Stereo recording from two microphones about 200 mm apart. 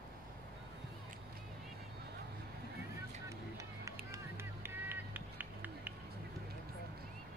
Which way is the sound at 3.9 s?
15° right (ahead or behind).